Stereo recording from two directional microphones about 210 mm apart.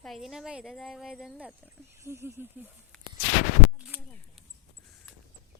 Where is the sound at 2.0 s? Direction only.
10° right (ahead or behind).